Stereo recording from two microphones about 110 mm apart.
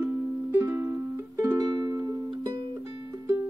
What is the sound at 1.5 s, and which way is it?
Music, 35° right (ahead or behind).